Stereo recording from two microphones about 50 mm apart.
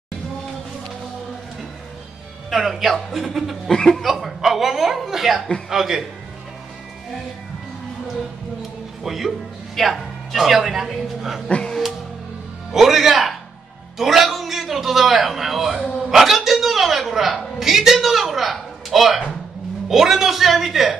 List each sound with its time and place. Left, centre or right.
2.5 s speech: centre
3.7 s speech: centre
4.0 s a man's voice: centre
9.0 s speech: centre
11.4 s speech: left
12.7 s music: centre
13.9 s a sound: centre
19.9 s speech: centre